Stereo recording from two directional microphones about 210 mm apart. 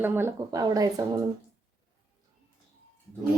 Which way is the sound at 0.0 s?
10° right (ahead or behind).